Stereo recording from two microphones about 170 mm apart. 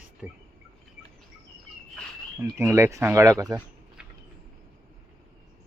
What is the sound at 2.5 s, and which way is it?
Speech, 15° right (ahead or behind).